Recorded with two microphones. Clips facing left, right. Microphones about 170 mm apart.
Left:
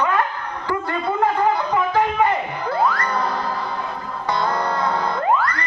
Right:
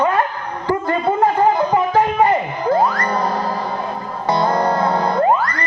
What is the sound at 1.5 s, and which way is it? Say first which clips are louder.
Music: right 4 dB; 40° right (ahead or behind).